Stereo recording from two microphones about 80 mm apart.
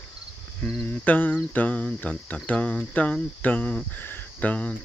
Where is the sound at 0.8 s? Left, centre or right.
Left.